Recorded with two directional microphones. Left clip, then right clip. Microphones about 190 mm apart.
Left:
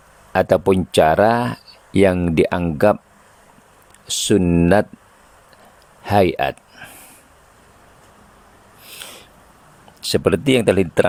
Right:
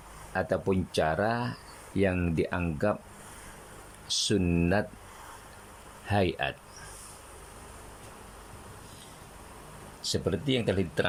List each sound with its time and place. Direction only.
0.3 s speech: 35° left (ahead or behind)
4.1 s speech: 35° left (ahead or behind)
6.1 s speech: 30° left (ahead or behind)
10.0 s speech: 45° left (ahead or behind)